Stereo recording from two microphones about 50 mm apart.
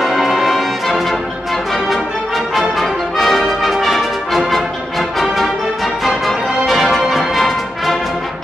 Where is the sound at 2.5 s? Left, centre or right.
Centre.